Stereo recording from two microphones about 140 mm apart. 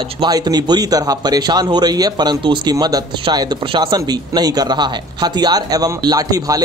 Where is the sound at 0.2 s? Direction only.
30° right (ahead or behind).